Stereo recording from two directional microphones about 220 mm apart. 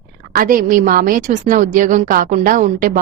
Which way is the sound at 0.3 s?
40° right (ahead or behind).